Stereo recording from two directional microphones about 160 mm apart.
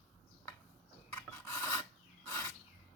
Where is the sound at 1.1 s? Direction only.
15° left (ahead or behind).